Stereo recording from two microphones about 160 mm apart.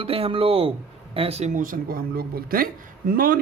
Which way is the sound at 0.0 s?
35° right (ahead or behind).